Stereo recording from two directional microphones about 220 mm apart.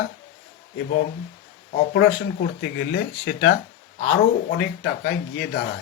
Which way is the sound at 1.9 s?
45° left (ahead or behind).